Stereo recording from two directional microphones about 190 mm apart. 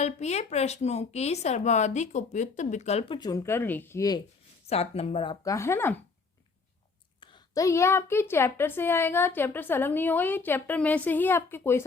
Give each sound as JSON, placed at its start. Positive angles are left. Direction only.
{"t": 0.0, "sound": "speech", "side_deg": 35}
{"t": 4.7, "sound": "speech", "side_deg": 30}
{"t": 7.2, "sound": "a woman's voice", "side_deg": 25}